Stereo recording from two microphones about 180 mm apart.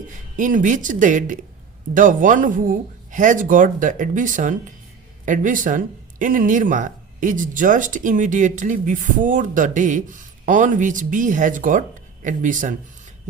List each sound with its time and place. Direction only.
0.1 s speech: 45° right (ahead or behind)